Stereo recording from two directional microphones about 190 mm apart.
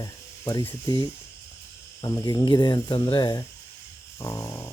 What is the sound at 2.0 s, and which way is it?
Speech, 20° left (ahead or behind).